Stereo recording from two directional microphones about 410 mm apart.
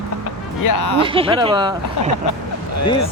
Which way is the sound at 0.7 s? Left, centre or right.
Left.